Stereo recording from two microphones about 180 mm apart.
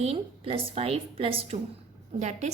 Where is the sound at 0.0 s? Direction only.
30° right (ahead or behind).